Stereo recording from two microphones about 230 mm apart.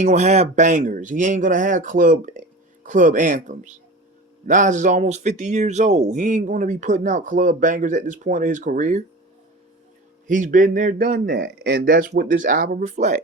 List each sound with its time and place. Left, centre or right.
0.0 s speech: right
10.2 s speech: right